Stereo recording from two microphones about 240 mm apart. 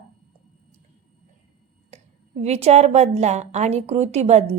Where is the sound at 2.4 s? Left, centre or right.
Right.